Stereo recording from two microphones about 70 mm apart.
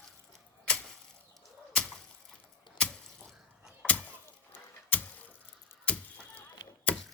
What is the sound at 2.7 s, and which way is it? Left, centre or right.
Drip, centre.